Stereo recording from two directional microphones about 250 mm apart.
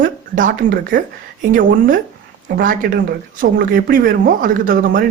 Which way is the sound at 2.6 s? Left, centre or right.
Right.